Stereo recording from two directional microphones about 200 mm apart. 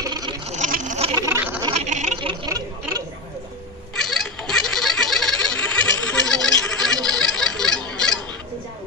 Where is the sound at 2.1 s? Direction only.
20° right (ahead or behind).